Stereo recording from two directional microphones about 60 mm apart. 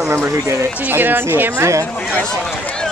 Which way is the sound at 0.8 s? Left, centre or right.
Right.